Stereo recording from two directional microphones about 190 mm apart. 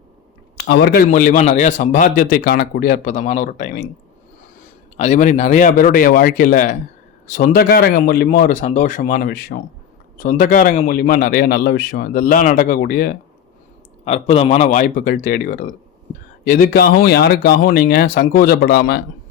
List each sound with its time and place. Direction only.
0.5 s speech: 55° left (ahead or behind)
1.0 s a man's voice: 40° left (ahead or behind)
4.9 s a man's voice: 40° left (ahead or behind)
14.0 s a man's voice: 35° left (ahead or behind); by 19.0 s 55° left (ahead or behind)